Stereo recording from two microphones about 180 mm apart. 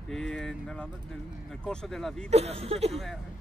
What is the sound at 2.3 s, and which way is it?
Speech, 35° right (ahead or behind).